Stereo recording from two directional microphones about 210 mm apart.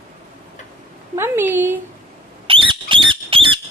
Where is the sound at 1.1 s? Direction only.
10° right (ahead or behind).